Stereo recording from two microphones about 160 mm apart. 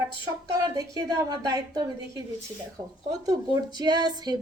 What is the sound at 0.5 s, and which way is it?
Speech, 20° right (ahead or behind).